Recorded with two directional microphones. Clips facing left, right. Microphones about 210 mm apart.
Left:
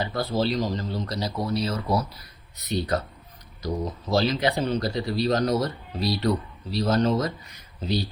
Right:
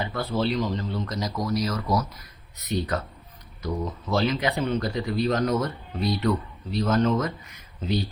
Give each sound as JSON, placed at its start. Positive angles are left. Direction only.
{"t": 0.0, "sound": "speech", "side_deg": 35}